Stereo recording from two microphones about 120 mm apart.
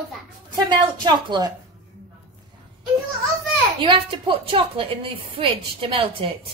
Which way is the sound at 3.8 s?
45° right (ahead or behind).